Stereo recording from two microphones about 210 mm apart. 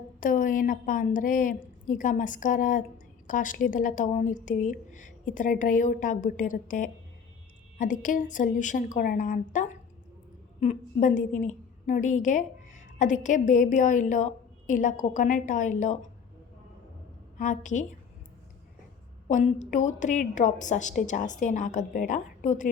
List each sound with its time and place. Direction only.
0.2 s a woman's voice: 40° left (ahead or behind)
17.3 s a woman's voice: 35° left (ahead or behind)
19.3 s a woman's voice: 35° left (ahead or behind)